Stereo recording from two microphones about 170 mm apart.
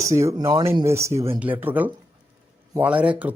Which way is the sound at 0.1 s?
20° right (ahead or behind).